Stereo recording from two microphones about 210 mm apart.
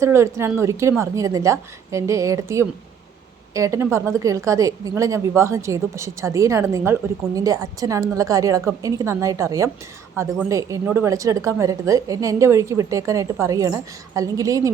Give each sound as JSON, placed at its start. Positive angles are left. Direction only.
{"t": 0.0, "sound": "a woman's voice", "side_deg": -15}